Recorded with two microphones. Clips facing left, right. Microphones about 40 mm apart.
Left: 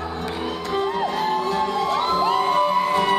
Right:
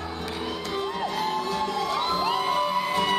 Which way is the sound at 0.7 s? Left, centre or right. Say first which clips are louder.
Left 7 dB; centre.